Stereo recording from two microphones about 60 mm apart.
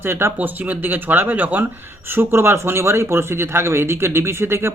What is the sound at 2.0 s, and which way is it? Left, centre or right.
Speech, right.